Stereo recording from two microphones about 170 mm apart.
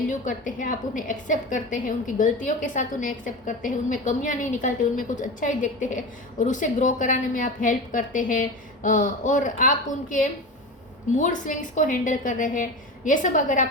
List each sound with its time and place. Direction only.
0.1 s a woman's voice: 50° left (ahead or behind)